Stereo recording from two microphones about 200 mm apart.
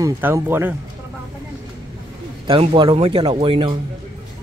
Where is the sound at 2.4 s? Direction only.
25° right (ahead or behind).